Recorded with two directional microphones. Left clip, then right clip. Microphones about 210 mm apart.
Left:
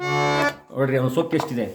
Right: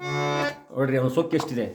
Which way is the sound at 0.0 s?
50° left (ahead or behind).